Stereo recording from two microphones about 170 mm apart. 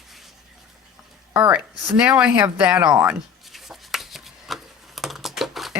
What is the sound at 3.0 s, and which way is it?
Chopping, 5° right (ahead or behind).